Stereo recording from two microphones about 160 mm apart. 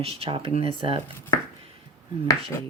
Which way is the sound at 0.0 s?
35° right (ahead or behind).